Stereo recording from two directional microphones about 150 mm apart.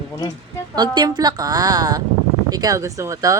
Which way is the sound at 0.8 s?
30° right (ahead or behind).